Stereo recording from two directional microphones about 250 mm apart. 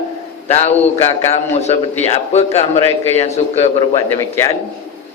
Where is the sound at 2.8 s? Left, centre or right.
Right.